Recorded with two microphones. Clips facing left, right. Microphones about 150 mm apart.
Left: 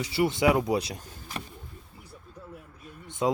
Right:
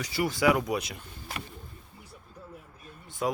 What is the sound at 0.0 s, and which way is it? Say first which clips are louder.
Speech: left 2 dB; 25° left (ahead or behind).